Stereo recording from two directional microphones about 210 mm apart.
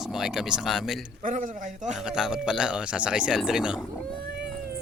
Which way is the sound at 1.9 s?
5° right (ahead or behind).